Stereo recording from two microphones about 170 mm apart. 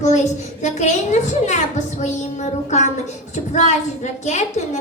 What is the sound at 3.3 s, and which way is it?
A woman's voice, 45° left (ahead or behind).